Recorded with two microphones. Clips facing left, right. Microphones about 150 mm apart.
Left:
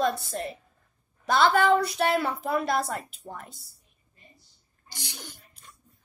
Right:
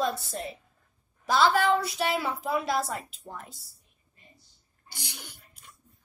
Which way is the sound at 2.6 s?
55° left (ahead or behind).